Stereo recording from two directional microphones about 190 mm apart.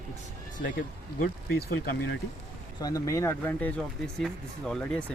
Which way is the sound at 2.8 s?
20° left (ahead or behind).